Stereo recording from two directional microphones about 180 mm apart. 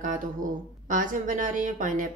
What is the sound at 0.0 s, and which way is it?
Speech, 45° right (ahead or behind).